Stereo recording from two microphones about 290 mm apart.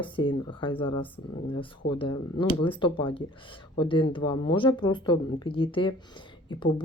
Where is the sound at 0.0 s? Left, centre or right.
Centre.